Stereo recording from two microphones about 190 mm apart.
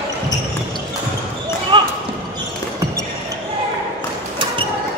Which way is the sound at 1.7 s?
25° right (ahead or behind).